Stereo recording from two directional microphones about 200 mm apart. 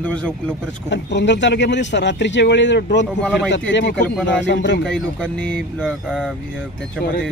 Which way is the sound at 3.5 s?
60° left (ahead or behind).